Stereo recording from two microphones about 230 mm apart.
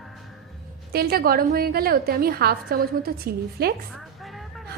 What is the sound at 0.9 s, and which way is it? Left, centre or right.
A woman's voice, right.